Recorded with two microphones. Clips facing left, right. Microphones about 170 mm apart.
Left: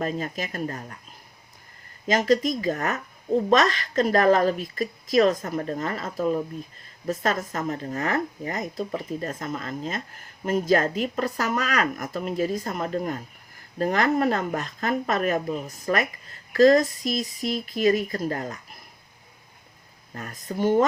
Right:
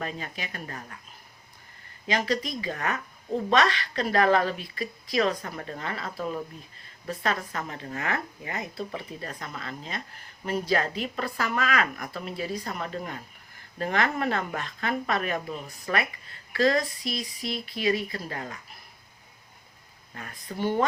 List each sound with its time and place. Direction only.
0.0 s speech: 40° left (ahead or behind)
2.0 s speech: 40° left (ahead or behind)
20.1 s speech: 40° left (ahead or behind)